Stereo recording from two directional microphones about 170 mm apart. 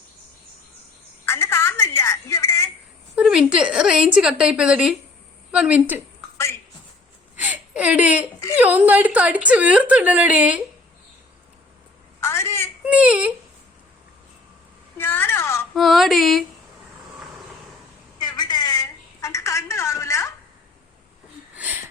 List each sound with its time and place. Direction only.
1.2 s a woman's voice: 15° left (ahead or behind)
3.2 s a woman's voice: 5° right (ahead or behind)
6.3 s a sound: 15° left (ahead or behind)
7.3 s a sound: 10° right (ahead or behind)
8.5 s a woman's voice: 10° right (ahead or behind)
12.2 s telephone: 15° left (ahead or behind)
12.8 s speech: 10° right (ahead or behind)
14.9 s a sound: 10° left (ahead or behind)
15.7 s a woman's voice: centre (ahead or behind)
18.2 s telephone: 25° left (ahead or behind)
21.5 s wheeze: 10° right (ahead or behind)